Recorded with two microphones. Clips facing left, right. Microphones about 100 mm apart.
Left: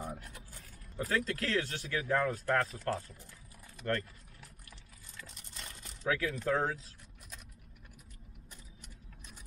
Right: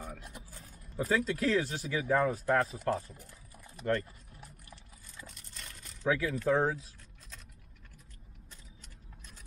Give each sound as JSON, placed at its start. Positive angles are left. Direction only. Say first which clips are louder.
{"t": 0.2, "sound": "speech", "louder": "right 2 dB", "side_deg": -20}
{"t": 3.8, "sound": "typing", "louder": "right 3 dB", "side_deg": -15}
{"t": 5.6, "sound": "a sound", "louder": "left 2 dB", "side_deg": 15}
{"t": 6.0, "sound": "speech", "louder": "right 3 dB", "side_deg": -15}